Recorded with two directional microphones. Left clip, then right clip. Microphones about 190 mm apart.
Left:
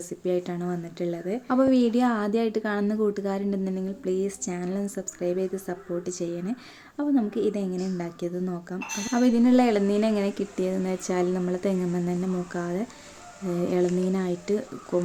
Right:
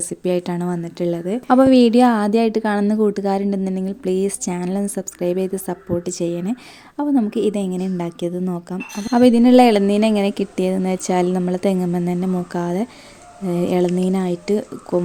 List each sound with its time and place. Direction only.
0.1 s a woman's voice: 50° right (ahead or behind); by 15.0 s 35° right (ahead or behind)